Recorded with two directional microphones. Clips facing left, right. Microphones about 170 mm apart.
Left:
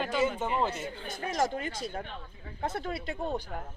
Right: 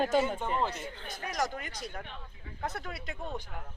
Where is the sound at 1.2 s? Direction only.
25° left (ahead or behind).